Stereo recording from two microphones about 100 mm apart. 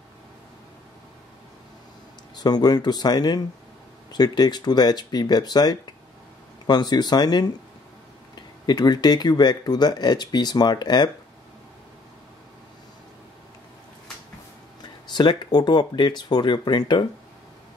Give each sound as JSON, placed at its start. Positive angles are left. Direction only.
{"t": 2.3, "sound": "speech", "side_deg": 45}
{"t": 14.8, "sound": "speech", "side_deg": 45}